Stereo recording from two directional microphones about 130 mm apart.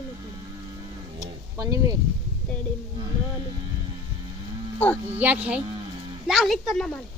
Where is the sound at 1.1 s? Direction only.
25° right (ahead or behind).